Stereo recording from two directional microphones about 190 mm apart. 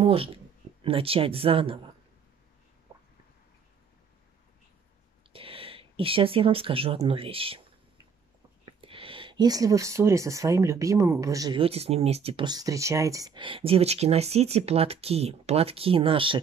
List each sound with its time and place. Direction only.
0.0 s speech: 30° right (ahead or behind)
5.3 s speech: 30° right (ahead or behind)
8.6 s speech: 30° right (ahead or behind)